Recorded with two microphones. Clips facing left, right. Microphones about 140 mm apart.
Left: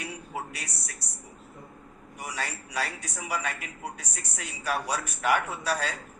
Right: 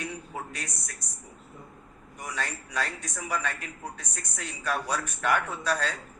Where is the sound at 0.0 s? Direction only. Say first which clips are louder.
Even; 10° left (ahead or behind).